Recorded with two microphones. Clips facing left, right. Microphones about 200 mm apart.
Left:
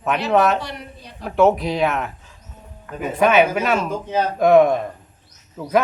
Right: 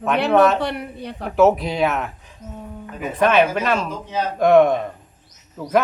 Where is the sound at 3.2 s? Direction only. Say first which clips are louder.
Left 1 dB; 5° left (ahead or behind).